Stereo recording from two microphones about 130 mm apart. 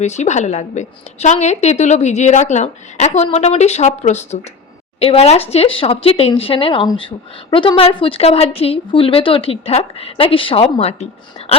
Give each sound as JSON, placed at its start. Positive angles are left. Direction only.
{"t": 0.0, "sound": "a woman's voice", "side_deg": 60}